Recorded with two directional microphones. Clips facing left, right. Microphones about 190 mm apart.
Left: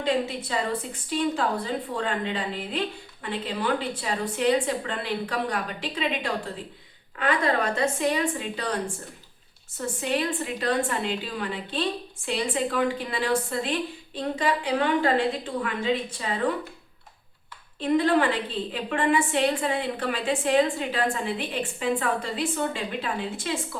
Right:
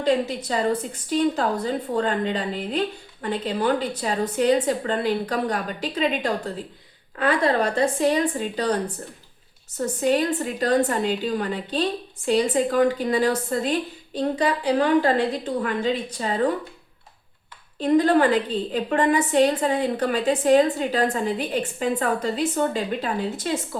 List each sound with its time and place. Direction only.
0.0 s a woman's voice: 40° right (ahead or behind)
17.7 s a woman's voice: 40° right (ahead or behind)